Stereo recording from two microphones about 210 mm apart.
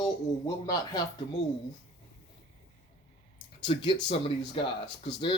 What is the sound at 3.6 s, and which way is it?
A man's voice, 25° left (ahead or behind).